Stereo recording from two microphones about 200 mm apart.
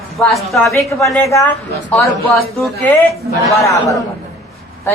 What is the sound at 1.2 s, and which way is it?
Speech, 15° left (ahead or behind).